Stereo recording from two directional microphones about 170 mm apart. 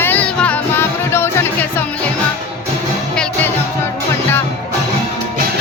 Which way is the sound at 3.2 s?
5° left (ahead or behind).